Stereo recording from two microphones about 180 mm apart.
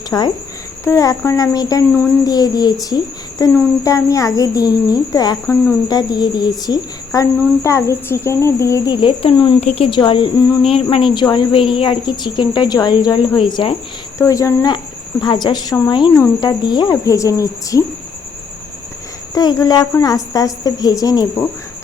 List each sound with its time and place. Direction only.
0.1 s speech: 15° left (ahead or behind)
19.3 s speech: 20° left (ahead or behind)